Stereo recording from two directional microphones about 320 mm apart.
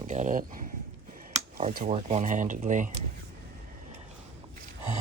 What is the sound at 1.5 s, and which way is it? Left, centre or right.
Speech, right.